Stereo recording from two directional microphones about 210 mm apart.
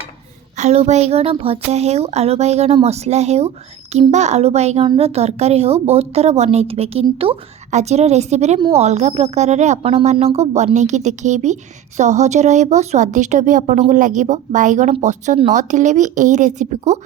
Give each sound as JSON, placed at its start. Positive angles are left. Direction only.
{"t": 0.5, "sound": "a child's voice", "side_deg": -30}